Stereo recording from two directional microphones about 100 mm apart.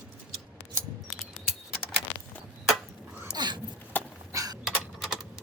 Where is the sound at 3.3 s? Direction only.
45° right (ahead or behind).